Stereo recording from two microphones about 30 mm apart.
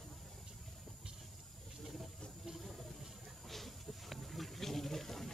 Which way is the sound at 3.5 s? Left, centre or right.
Centre.